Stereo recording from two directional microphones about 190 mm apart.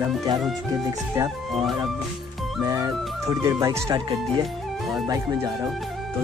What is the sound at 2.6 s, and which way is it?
Speech, 15° right (ahead or behind).